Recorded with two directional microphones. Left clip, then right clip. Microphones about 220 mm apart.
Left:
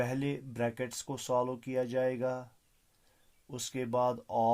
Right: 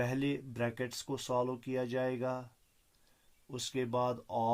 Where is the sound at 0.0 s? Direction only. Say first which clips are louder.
Left 1 dB; 40° left (ahead or behind).